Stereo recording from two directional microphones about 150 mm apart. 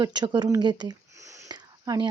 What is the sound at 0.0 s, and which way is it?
Speech, 30° right (ahead or behind).